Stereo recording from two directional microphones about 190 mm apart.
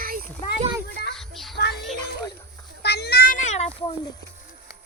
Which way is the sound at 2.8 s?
60° left (ahead or behind).